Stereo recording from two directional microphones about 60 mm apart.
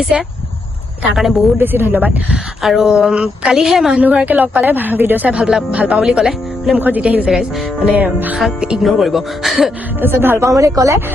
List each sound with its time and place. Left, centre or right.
0.0 s a woman's voice: centre
1.5 s speech: right
2.3 s a woman's voice: centre
4.0 s speech: right
5.3 s a woman's voice: centre
6.7 s speech: right
8.4 s a woman's voice: centre
10.0 s speech: right
10.4 s speech: right